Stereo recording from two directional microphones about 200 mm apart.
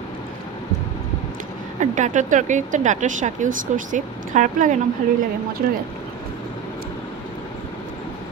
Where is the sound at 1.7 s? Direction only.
35° right (ahead or behind).